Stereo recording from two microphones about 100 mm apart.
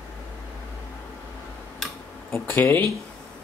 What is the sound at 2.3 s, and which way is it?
Speech, 20° left (ahead or behind).